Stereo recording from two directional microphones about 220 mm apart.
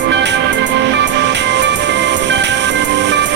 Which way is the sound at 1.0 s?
50° right (ahead or behind).